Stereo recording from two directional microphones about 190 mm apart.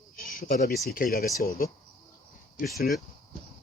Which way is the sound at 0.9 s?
50° left (ahead or behind).